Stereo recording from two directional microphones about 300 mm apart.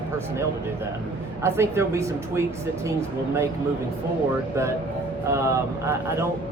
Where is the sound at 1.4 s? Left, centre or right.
Centre.